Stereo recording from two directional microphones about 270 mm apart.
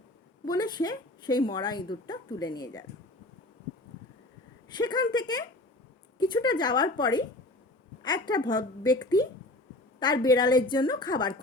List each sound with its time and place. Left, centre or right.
0.4 s speech: centre
4.7 s speech: centre
8.4 s speech: centre